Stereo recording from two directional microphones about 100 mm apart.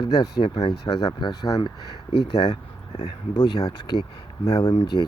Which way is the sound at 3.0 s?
45° left (ahead or behind).